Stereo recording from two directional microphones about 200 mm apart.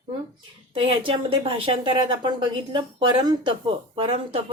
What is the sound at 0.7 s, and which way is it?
A woman's voice, 25° right (ahead or behind).